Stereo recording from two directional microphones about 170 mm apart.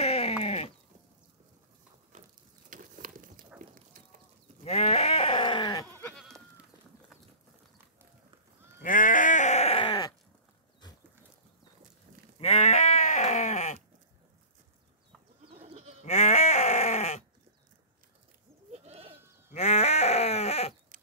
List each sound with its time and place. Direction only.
0.0 s sheep: 35° left (ahead or behind)
2.2 s a sound: 45° right (ahead or behind)
3.6 s livestock: 50° right (ahead or behind)
4.6 s sheep: 40° left (ahead or behind)
5.9 s sheep: 5° left (ahead or behind)
8.8 s sheep: 50° left (ahead or behind); by 10.1 s 25° left (ahead or behind)
12.4 s sheep: 40° left (ahead or behind)
15.4 s goat: 35° right (ahead or behind)
16.0 s sheep: 45° left (ahead or behind)
18.7 s goat: 35° right (ahead or behind)
19.5 s sheep: 40° left (ahead or behind)